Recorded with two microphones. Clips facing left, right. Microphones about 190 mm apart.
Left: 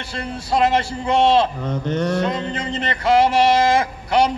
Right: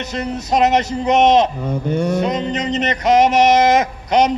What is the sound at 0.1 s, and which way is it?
A man's voice, 20° right (ahead or behind).